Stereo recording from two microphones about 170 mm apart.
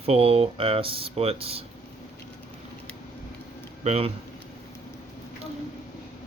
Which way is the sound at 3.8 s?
35° right (ahead or behind).